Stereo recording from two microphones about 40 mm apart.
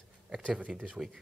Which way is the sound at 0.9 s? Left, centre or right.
Centre.